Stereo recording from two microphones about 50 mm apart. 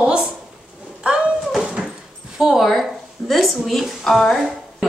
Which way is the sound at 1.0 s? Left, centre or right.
Right.